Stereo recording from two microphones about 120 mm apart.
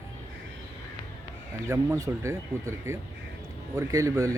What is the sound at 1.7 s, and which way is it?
Speech, 25° right (ahead or behind).